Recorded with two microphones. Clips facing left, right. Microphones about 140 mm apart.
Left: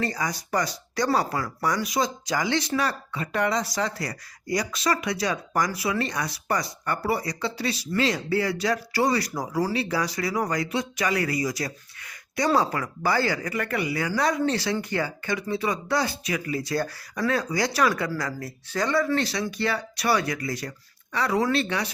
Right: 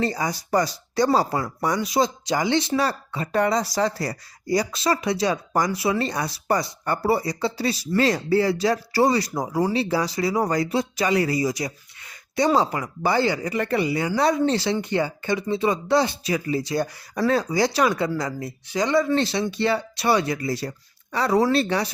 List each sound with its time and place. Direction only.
0.0 s speech: 30° right (ahead or behind)
17.2 s speech: 30° right (ahead or behind)